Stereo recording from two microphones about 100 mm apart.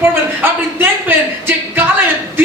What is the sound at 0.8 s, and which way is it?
Speech, 20° right (ahead or behind).